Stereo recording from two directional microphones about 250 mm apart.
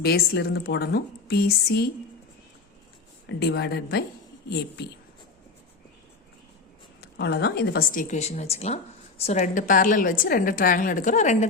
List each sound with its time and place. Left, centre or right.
0.0 s speech: left
3.2 s speech: left
7.0 s speech: left